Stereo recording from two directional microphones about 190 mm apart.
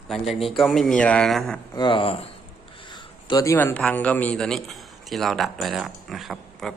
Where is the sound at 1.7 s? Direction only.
25° left (ahead or behind); by 6.7 s centre (ahead or behind).